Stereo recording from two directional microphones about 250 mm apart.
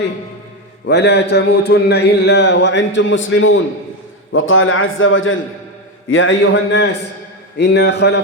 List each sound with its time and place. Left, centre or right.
0.9 s speech: left